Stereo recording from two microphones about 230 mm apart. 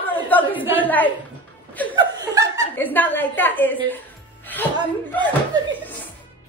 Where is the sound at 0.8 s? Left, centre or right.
Centre.